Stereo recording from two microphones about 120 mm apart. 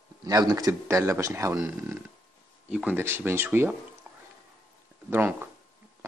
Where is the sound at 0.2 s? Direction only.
30° right (ahead or behind).